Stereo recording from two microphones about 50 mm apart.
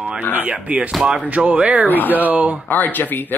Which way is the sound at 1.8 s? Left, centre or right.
Left.